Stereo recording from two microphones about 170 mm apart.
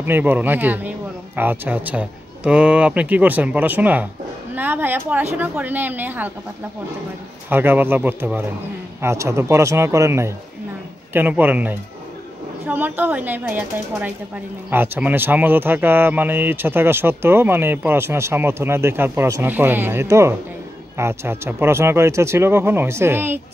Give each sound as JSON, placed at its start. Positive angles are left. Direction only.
{"t": 0.0, "sound": "speech", "side_deg": -10}
{"t": 7.4, "sound": "speech", "side_deg": -10}